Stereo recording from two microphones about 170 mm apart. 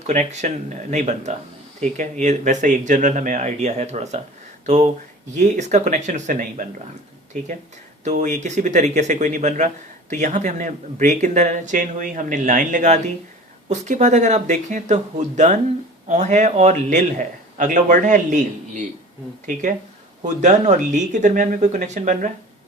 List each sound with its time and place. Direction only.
0.1 s speech: 45° right (ahead or behind)
8.0 s speech: 45° right (ahead or behind)
20.2 s speech: 45° right (ahead or behind)